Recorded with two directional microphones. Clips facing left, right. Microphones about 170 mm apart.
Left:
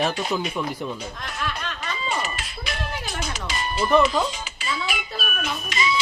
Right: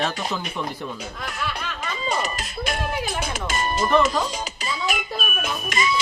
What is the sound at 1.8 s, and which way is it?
Music, 40° right (ahead or behind).